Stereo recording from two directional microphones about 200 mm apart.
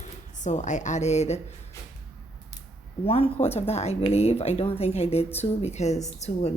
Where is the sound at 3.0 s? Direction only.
30° left (ahead or behind).